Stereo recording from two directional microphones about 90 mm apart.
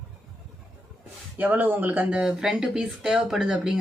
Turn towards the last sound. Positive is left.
turn(degrees=-5)  # may be behind; listen again after turning